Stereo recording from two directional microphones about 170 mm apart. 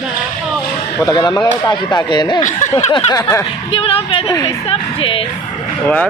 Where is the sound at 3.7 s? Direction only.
30° left (ahead or behind).